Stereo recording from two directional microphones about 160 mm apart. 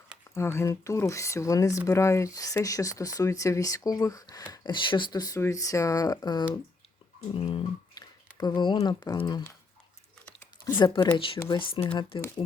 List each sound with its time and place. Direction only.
0.3 s speech: 15° left (ahead or behind)
10.8 s speech: 30° left (ahead or behind)